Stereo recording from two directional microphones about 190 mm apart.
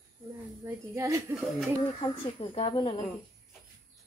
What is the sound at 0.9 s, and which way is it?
Speech, 15° right (ahead or behind).